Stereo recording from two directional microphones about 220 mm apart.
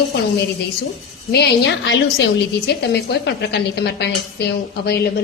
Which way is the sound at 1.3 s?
50° left (ahead or behind).